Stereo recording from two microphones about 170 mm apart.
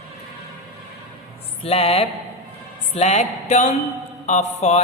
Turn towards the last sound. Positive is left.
turn(degrees=40)  # may be behind; listen again after turning